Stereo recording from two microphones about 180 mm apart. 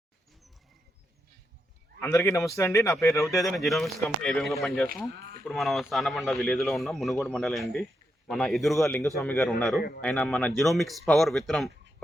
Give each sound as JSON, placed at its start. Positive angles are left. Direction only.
{"t": 2.0, "sound": "speech", "side_deg": 15}
{"t": 3.3, "sound": "speech", "side_deg": 0}